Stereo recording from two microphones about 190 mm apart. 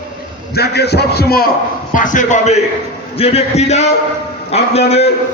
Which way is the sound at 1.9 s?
40° left (ahead or behind).